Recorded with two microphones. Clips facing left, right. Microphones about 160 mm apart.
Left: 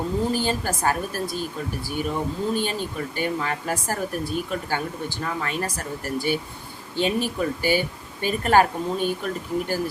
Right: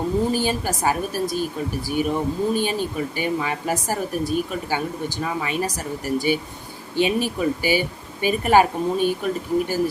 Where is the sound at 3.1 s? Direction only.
15° right (ahead or behind).